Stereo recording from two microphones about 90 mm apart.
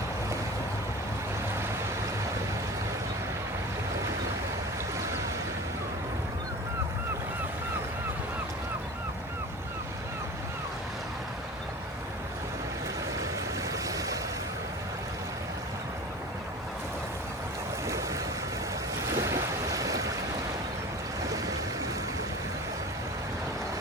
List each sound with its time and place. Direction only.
13.8 s waves: 40° right (ahead or behind)
17.8 s boat: 35° right (ahead or behind)
21.2 s waves: 40° right (ahead or behind)